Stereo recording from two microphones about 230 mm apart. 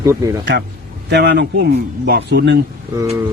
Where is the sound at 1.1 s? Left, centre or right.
Right.